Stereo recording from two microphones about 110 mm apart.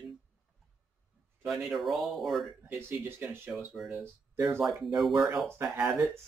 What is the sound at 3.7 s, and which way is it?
Speech, 5° right (ahead or behind).